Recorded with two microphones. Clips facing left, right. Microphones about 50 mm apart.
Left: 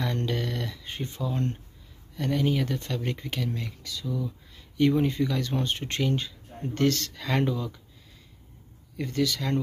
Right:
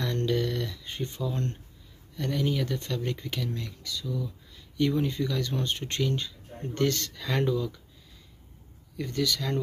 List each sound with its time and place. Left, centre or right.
0.0 s a sound: centre
2.1 s speech: centre
8.9 s speech: centre